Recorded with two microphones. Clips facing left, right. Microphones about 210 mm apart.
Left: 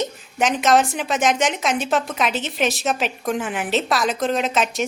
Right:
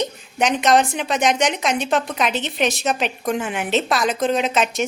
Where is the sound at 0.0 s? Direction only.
Centre (ahead or behind).